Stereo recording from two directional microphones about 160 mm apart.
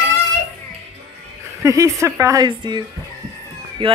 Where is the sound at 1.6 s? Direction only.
20° right (ahead or behind).